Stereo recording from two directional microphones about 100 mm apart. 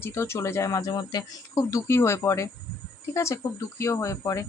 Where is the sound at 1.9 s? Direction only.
25° left (ahead or behind).